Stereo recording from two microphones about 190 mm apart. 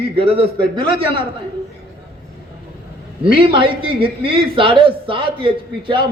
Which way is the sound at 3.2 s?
30° right (ahead or behind).